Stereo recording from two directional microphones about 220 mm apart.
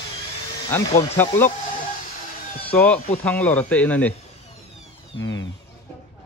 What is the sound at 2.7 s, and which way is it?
Speech, 5° left (ahead or behind).